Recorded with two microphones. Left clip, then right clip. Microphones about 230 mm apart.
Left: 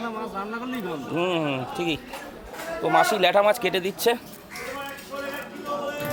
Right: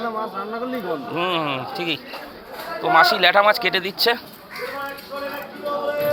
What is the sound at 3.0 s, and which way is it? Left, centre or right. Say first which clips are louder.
Speech: right 4 dB; centre.